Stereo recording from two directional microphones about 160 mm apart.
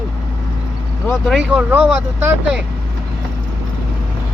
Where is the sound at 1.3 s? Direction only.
5° right (ahead or behind).